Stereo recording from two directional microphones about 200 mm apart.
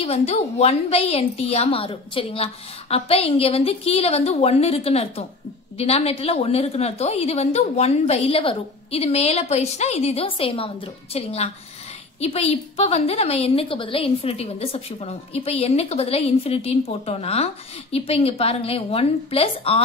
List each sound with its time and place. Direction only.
0.0 s a woman's voice: 30° left (ahead or behind)